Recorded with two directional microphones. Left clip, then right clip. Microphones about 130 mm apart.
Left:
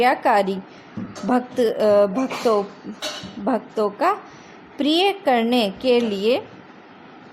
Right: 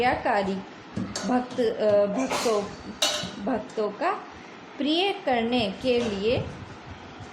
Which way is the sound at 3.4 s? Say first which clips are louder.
Left 8 dB; 55° left (ahead or behind).